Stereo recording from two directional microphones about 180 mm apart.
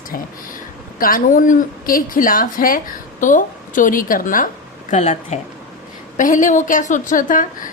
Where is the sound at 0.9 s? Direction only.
55° left (ahead or behind).